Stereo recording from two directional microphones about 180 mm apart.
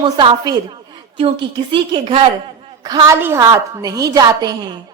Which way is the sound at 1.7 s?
30° right (ahead or behind).